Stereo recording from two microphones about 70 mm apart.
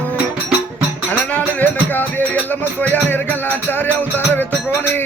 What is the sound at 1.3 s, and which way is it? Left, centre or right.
Music, left.